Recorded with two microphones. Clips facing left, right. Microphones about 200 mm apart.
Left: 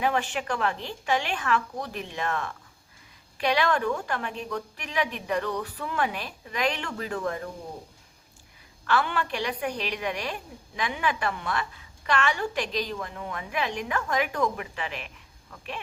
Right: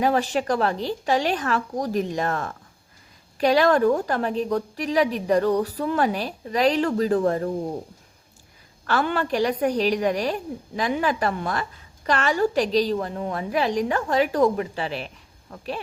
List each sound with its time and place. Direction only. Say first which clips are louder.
0.0 s a woman's voice: right 6 dB; 40° right (ahead or behind)
8.9 s a woman's voice: right 4 dB; 40° right (ahead or behind)